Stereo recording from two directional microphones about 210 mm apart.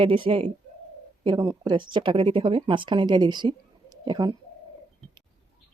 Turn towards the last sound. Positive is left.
turn(degrees=-20)  # may be behind; listen again after turning